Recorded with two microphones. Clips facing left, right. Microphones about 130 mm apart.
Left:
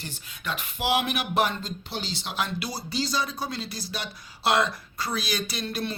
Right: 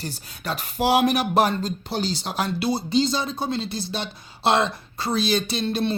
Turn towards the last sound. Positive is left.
turn(degrees=-25)  # may be behind; listen again after turning